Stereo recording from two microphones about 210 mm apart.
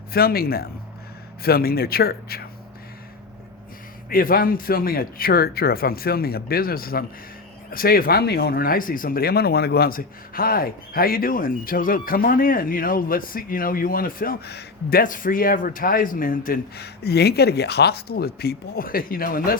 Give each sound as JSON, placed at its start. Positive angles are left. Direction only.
{"t": 0.1, "sound": "speech", "side_deg": 45}
{"t": 4.1, "sound": "speech", "side_deg": 45}